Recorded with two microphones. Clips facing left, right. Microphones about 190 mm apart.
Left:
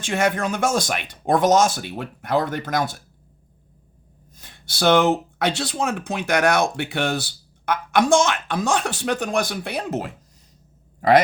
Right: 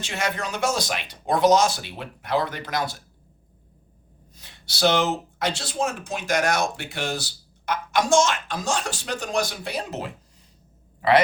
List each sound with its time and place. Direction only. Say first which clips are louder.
0.0 s speech: left 7 dB; 50° left (ahead or behind)
4.4 s speech: right 1 dB; 50° left (ahead or behind)